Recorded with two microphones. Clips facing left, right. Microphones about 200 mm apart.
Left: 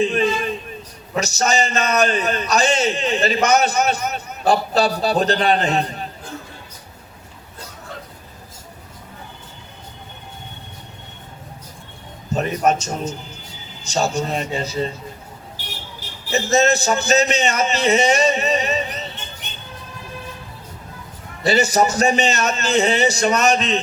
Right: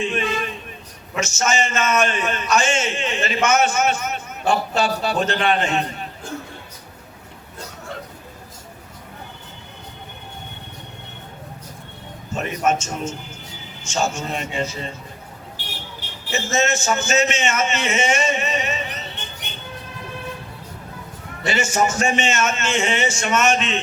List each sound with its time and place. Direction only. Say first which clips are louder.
0.0 s a sound: left 5 dB; 35° left (ahead or behind)
1.1 s a man's voice: left 2 dB; 35° left (ahead or behind)
12.3 s a man's voice: left 3 dB; 35° left (ahead or behind)
16.3 s a man's voice: left 5 dB; 35° left (ahead or behind)
21.4 s a man's voice: left 4 dB; 35° left (ahead or behind)